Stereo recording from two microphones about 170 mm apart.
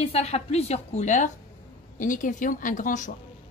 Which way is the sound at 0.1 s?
40° left (ahead or behind).